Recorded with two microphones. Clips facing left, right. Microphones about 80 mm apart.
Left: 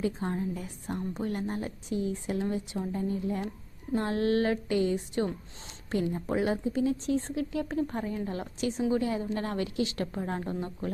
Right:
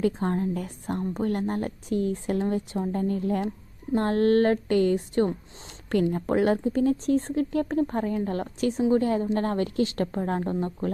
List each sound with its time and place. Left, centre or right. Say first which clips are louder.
0.0 s speech: right 6 dB; right
3.9 s a woman's voice: right 6 dB; right